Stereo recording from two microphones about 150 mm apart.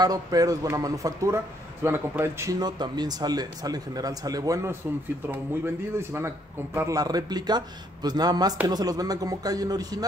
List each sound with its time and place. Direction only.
0.0 s a man's voice: 25° right (ahead or behind)
5.9 s a man's voice: 15° right (ahead or behind)